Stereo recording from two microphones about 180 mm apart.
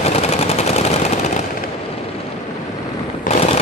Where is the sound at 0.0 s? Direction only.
35° left (ahead or behind).